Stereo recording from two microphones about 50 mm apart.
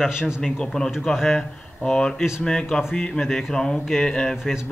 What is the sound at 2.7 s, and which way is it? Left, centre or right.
Speech, centre.